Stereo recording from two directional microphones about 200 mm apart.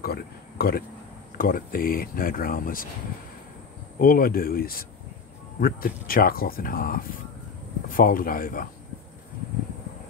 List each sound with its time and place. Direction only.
0.0 s speech: 50° left (ahead or behind)
4.0 s speech: 45° left (ahead or behind)